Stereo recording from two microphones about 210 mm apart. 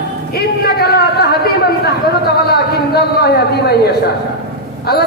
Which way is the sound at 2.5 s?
50° left (ahead or behind).